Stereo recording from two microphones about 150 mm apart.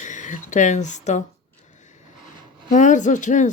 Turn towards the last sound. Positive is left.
turn(degrees=55)  # may be behind; listen again after turning